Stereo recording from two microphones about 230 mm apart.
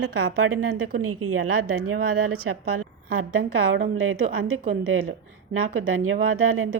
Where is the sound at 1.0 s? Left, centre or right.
Right.